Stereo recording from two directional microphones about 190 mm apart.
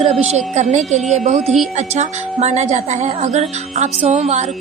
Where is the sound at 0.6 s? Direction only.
35° right (ahead or behind).